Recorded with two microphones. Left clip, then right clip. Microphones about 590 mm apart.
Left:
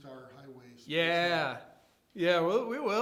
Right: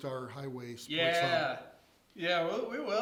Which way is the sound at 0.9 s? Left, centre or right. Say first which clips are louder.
Left 1 dB; left.